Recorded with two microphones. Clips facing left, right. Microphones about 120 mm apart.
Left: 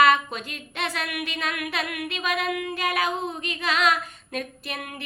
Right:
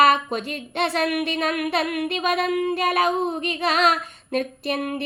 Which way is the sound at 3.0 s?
60° right (ahead or behind).